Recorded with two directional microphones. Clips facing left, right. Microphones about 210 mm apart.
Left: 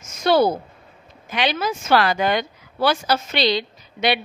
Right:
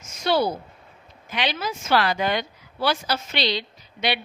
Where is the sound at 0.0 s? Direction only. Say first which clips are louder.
Left 5 dB; 45° left (ahead or behind).